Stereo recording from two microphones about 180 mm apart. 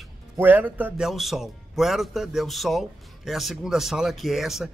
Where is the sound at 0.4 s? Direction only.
10° right (ahead or behind).